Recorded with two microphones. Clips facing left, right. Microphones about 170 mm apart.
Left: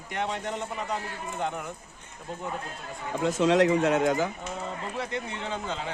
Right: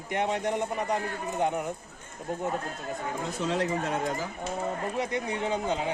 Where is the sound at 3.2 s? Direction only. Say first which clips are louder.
Left 9 dB; 80° left.